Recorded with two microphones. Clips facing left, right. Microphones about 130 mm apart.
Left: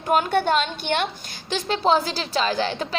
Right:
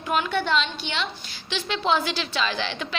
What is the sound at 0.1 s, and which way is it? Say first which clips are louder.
A woman's voice: left 4 dB; 45° left (ahead or behind).